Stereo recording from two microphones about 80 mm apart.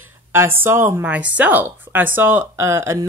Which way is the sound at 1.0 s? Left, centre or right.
Centre.